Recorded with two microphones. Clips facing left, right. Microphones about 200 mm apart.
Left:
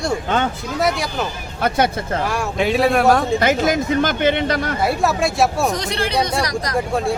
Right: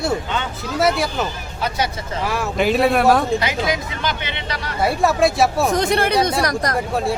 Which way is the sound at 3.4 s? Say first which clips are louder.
Left 5 dB; 50° left (ahead or behind).